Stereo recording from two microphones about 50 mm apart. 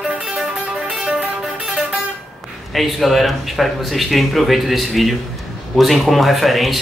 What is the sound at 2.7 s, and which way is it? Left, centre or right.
Speech, centre.